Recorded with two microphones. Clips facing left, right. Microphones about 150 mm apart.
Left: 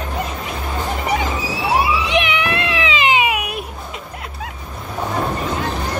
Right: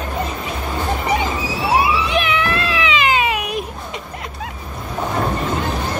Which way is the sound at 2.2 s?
20° left (ahead or behind).